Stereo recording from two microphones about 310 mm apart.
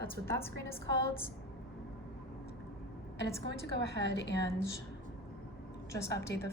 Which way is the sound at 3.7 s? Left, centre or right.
Left.